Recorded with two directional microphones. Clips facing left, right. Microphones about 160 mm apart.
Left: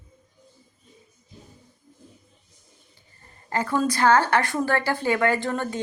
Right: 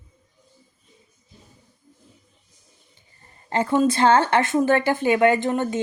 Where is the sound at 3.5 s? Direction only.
25° right (ahead or behind).